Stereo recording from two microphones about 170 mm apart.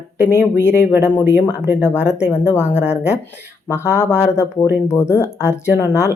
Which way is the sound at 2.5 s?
15° left (ahead or behind).